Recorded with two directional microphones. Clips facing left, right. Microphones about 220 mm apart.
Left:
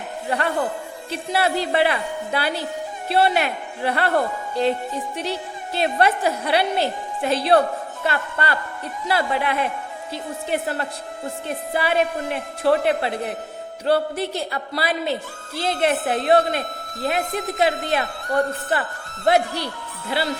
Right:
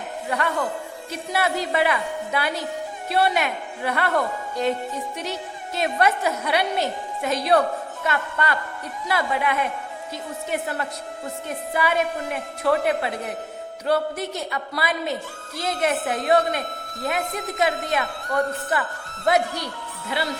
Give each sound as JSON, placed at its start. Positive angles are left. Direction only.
{"t": 0.3, "sound": "a woman's voice", "side_deg": 30}